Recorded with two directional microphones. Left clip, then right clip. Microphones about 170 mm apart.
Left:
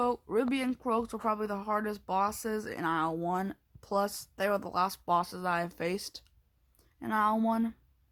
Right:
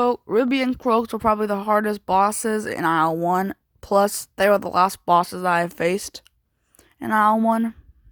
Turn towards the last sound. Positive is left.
turn(degrees=-40)  # may be behind; listen again after turning